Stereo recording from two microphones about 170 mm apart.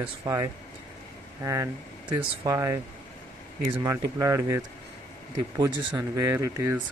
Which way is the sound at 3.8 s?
20° right (ahead or behind).